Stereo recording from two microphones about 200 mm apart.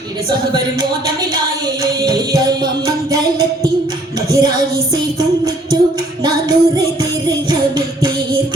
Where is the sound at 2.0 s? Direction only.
20° right (ahead or behind).